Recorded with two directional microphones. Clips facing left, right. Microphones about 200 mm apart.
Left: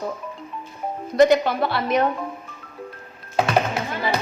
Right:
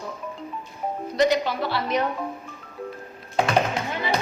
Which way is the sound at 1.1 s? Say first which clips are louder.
Left 6 dB; 50° left (ahead or behind).